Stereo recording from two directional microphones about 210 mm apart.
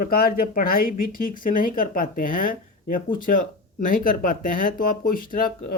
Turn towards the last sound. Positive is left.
turn(degrees=40)  # may be behind; listen again after turning